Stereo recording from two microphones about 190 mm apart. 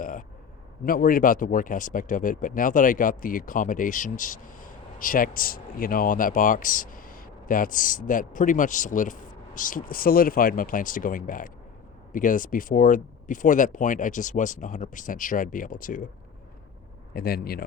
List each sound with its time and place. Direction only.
0.0 s a sound: 45° left (ahead or behind)
0.9 s speech: 50° left (ahead or behind)
17.2 s speech: 50° left (ahead or behind)